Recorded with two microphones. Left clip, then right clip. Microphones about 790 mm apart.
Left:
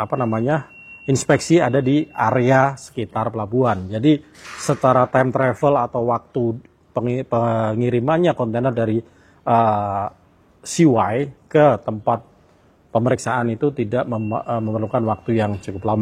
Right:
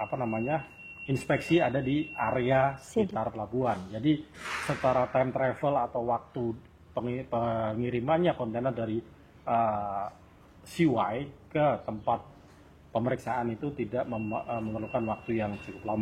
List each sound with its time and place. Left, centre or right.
0.1 s speech: left